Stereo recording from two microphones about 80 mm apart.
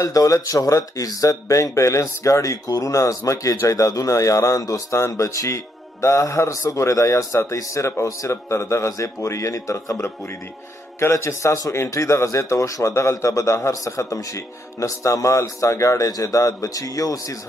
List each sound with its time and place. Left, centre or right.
0.0 s a man's voice: left